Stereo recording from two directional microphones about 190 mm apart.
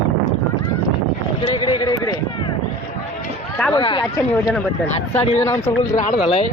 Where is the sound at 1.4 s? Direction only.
25° left (ahead or behind).